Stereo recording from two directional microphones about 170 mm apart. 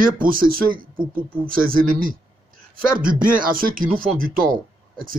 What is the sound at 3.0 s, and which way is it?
Speech, 55° right (ahead or behind).